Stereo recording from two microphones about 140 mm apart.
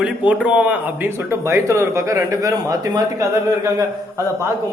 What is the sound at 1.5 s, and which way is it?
Speech, 20° right (ahead or behind).